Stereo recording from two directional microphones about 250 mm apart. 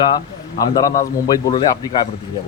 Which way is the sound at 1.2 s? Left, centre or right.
Centre.